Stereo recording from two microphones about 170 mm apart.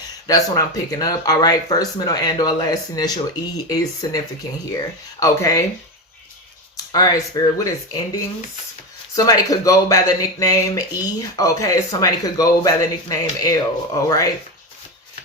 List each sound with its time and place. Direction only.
0.3 s speech: 20° left (ahead or behind)
5.2 s speech: 20° left (ahead or behind)
6.7 s speech: 20° left (ahead or behind)